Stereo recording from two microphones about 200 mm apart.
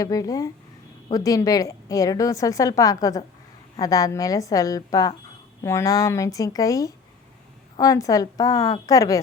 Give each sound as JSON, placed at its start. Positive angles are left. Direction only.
{"t": 0.0, "sound": "a woman's voice", "side_deg": 15}